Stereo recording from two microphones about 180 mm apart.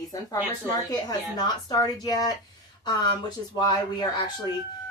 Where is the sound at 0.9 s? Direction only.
20° left (ahead or behind).